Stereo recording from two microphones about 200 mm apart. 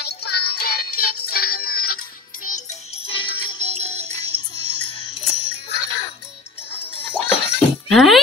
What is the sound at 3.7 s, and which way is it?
Music, 30° right (ahead or behind).